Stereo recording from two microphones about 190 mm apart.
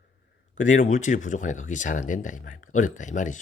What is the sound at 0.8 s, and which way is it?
Speech, 40° left (ahead or behind).